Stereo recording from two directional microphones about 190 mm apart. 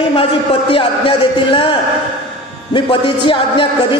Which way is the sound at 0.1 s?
30° left (ahead or behind).